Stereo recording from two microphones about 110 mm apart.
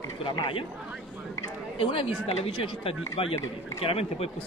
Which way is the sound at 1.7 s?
60° left (ahead or behind).